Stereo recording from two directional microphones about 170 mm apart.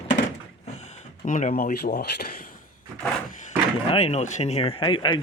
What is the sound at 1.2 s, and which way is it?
Speech, 45° left (ahead or behind).